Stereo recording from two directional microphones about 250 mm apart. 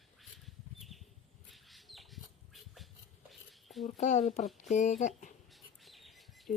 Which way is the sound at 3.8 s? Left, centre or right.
Left.